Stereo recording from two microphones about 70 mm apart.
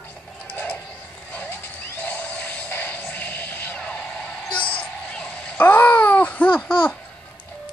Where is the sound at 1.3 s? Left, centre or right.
Left.